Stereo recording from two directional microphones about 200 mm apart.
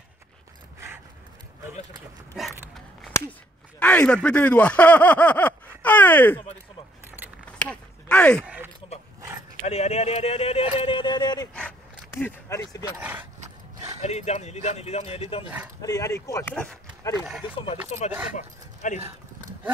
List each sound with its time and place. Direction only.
2.4 s speech: centre (ahead or behind)
3.8 s speech: 5° left (ahead or behind)
7.6 s a sound: 5° left (ahead or behind)
8.4 s a sound: 10° right (ahead or behind)
9.6 s speech: 35° left (ahead or behind)
11.5 s a sound: 5° left (ahead or behind)
14.0 s speech: 35° left (ahead or behind)
15.8 s speech: 15° left (ahead or behind)
17.2 s speech: 5° right (ahead or behind)
17.9 s speech: 30° left (ahead or behind)